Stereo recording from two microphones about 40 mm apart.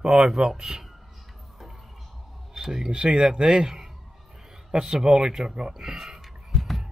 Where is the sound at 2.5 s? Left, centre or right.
Centre.